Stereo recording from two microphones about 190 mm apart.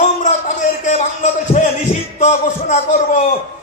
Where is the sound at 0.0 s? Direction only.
40° left (ahead or behind).